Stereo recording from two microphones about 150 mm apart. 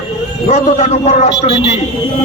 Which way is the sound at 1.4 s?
30° left (ahead or behind).